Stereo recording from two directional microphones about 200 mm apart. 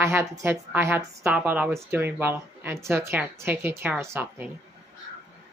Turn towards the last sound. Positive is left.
turn(degrees=-10)  # may be behind; listen again after turning